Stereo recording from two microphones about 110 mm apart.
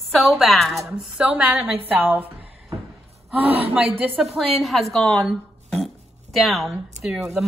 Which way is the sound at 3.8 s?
5° right (ahead or behind).